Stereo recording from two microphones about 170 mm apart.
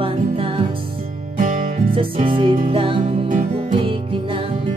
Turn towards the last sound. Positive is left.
turn(degrees=-30)  # may be behind; listen again after turning